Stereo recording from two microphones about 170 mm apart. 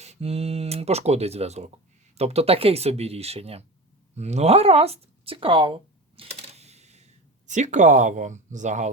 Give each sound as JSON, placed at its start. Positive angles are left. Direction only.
{"t": 0.0, "sound": "speech", "side_deg": -40}